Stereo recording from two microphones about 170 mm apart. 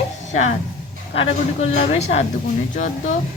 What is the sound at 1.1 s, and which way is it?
A woman's voice, 35° left (ahead or behind).